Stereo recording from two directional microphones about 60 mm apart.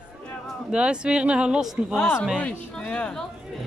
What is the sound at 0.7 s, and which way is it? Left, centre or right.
Speech, centre.